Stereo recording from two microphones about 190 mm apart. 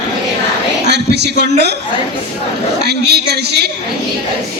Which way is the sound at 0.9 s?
60° right (ahead or behind).